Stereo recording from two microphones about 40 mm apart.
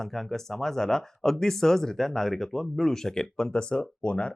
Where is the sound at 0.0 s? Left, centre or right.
Centre.